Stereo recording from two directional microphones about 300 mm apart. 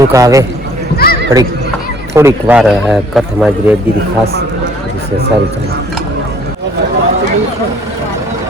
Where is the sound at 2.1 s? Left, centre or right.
Centre.